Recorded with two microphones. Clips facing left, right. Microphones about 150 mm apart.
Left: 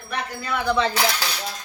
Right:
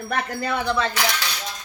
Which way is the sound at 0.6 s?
15° left (ahead or behind).